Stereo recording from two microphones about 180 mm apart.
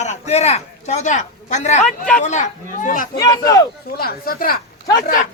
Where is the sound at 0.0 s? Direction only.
40° left (ahead or behind).